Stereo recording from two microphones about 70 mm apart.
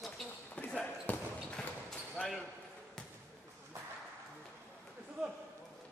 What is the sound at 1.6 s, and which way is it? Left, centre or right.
Basketball bounce, centre.